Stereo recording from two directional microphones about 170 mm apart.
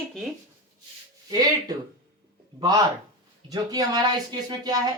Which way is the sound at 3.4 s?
20° right (ahead or behind).